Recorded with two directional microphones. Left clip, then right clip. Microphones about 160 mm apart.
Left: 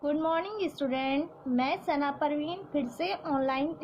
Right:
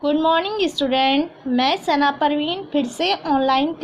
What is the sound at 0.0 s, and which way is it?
A woman's voice, 30° right (ahead or behind).